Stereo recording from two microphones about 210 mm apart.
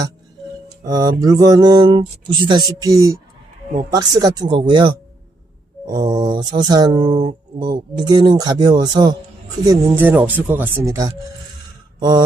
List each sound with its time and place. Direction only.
0.9 s music: 20° right (ahead or behind)
9.6 s speech: 10° right (ahead or behind)